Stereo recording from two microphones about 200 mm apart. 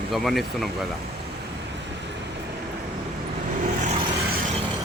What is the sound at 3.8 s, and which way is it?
Vehicle, 35° right (ahead or behind).